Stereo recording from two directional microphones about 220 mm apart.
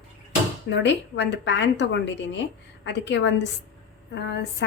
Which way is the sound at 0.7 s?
50° left (ahead or behind).